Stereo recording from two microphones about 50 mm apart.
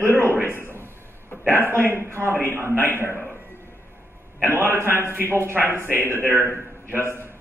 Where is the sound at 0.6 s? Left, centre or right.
Right.